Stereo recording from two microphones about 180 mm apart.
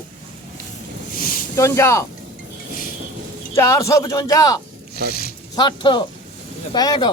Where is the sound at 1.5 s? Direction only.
15° left (ahead or behind).